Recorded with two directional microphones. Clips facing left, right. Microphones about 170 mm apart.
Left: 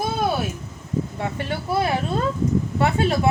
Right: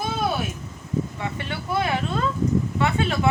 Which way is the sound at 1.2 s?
45° left (ahead or behind).